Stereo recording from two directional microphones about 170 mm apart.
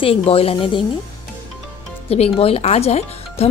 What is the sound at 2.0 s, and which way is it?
Speech, 35° left (ahead or behind).